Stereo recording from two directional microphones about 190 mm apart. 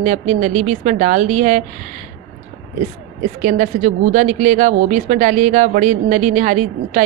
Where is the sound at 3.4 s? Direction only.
40° right (ahead or behind).